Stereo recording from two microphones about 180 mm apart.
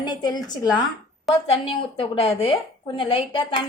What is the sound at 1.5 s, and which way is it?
A woman's voice, 30° left (ahead or behind).